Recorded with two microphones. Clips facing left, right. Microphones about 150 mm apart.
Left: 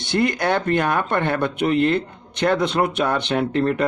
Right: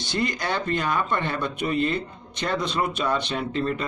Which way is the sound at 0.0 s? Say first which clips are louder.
Left 6 dB; 60° left (ahead or behind).